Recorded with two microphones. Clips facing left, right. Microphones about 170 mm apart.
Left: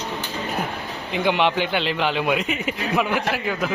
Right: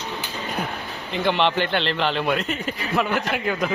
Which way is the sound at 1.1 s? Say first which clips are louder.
Left 1 dB; 10° left (ahead or behind).